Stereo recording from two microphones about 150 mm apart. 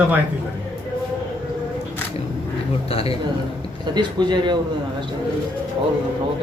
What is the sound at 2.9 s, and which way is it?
Speech, 40° left (ahead or behind).